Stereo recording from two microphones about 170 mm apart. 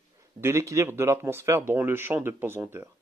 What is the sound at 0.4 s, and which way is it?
Speech, 15° right (ahead or behind).